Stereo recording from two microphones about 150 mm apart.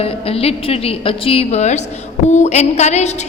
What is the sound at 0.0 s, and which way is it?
A woman's voice, 40° left (ahead or behind).